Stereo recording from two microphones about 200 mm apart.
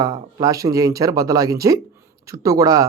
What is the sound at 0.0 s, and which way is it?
Speech, 20° right (ahead or behind).